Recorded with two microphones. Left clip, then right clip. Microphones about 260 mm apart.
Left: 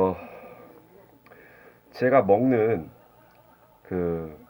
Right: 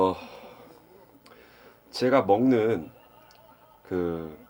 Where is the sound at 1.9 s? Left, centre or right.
Centre.